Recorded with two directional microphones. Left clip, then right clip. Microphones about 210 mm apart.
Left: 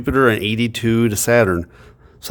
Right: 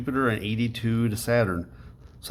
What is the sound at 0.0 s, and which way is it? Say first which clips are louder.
Speech: left 11 dB; 45° left (ahead or behind).